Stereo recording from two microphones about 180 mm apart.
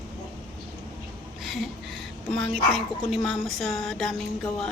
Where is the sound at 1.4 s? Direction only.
Centre (ahead or behind).